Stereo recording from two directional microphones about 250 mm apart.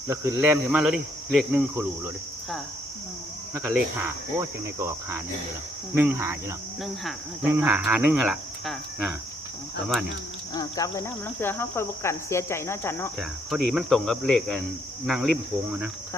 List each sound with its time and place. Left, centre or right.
0.2 s cricket: centre
3.5 s cricket: centre
10.5 s cricket: centre
13.1 s cricket: centre